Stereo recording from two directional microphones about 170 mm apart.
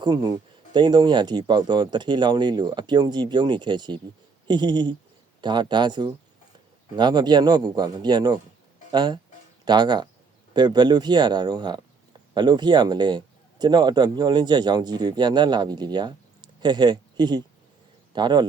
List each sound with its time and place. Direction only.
0.0 s speech: 25° right (ahead or behind)